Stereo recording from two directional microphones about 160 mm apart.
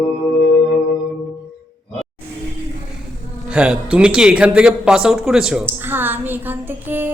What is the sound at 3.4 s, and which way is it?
Speech, 5° right (ahead or behind).